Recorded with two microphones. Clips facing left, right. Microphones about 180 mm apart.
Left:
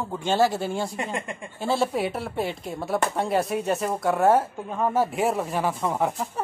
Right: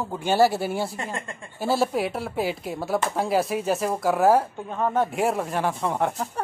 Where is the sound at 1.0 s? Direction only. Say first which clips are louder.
Left 2 dB; 15° left (ahead or behind).